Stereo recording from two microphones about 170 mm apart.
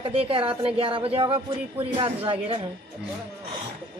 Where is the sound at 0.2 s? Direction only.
30° right (ahead or behind).